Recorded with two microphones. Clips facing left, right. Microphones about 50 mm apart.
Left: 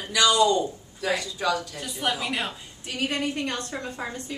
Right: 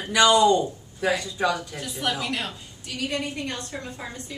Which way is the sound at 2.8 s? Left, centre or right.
Left.